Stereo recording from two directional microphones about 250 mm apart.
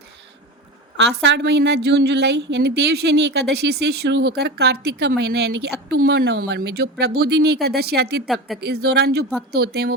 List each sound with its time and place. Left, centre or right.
0.9 s a woman's voice: right